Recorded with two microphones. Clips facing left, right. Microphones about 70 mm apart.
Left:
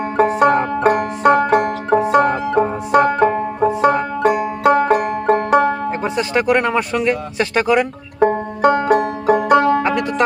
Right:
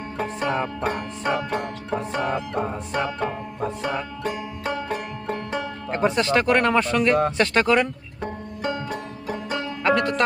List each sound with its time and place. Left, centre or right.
0.2 s banjo: left
5.9 s speech: centre
8.2 s banjo: left
9.8 s music: centre